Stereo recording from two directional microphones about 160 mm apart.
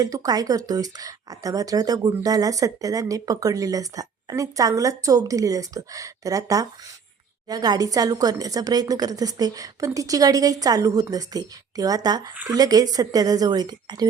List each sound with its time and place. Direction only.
0.0 s speech: 20° right (ahead or behind)